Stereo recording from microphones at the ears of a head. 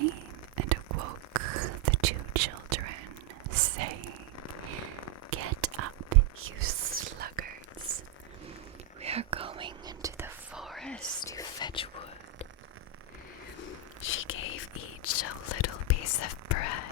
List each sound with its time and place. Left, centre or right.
0.0 s whispering: right
5.3 s whispering: right
10.7 s whispering: centre
11.2 s whispering: left
13.6 s whispering: left